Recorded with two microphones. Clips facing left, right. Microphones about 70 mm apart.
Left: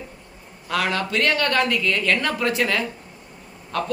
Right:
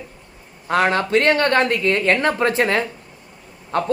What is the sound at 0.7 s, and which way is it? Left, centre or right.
A man's voice, right.